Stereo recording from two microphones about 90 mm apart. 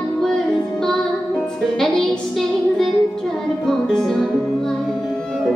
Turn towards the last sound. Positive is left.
turn(degrees=5)  # may be behind; listen again after turning